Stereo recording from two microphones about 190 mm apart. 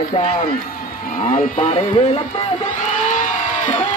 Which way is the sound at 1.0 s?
45° left (ahead or behind).